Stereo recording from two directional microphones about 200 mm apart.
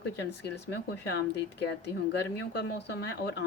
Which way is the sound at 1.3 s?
60° left (ahead or behind).